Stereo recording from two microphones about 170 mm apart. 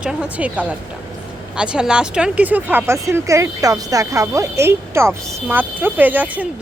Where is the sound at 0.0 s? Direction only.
5° right (ahead or behind).